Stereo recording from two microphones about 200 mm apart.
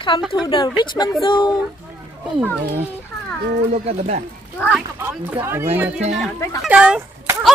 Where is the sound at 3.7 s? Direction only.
35° right (ahead or behind).